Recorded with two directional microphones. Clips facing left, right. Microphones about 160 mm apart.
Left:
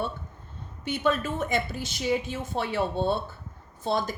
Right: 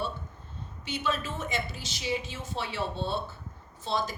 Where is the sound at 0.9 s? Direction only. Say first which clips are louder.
Left 6 dB; 55° left (ahead or behind).